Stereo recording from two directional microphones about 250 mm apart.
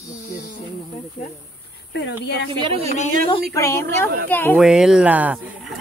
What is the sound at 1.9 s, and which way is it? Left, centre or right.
Speech, left.